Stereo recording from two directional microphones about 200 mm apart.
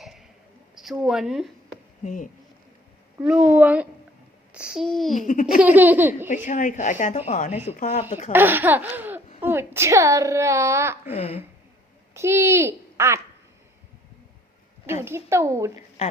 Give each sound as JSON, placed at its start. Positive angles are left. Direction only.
{"t": 0.0, "sound": "a sound", "side_deg": 0}
{"t": 0.8, "sound": "speech", "side_deg": 0}
{"t": 2.0, "sound": "a woman's voice", "side_deg": 40}
{"t": 3.2, "sound": "a woman's voice", "side_deg": -10}
{"t": 5.1, "sound": "a woman's voice", "side_deg": 40}
{"t": 5.5, "sound": "a woman's voice", "side_deg": -10}
{"t": 6.2, "sound": "a woman's voice", "side_deg": 40}
{"t": 8.3, "sound": "a woman's voice", "side_deg": -10}
{"t": 11.1, "sound": "speech", "side_deg": 30}
{"t": 12.1, "sound": "a woman's voice", "side_deg": -15}
{"t": 14.9, "sound": "a woman's voice", "side_deg": -15}